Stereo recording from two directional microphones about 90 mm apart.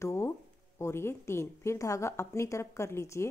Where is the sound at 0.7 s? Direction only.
30° left (ahead or behind).